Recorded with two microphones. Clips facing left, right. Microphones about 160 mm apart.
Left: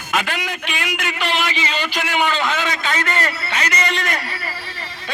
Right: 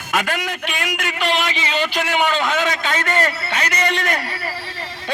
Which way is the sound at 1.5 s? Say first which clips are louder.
Right 2 dB; 55° right (ahead or behind).